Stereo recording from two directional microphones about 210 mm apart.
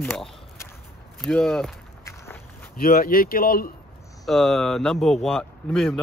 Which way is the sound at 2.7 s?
45° left (ahead or behind).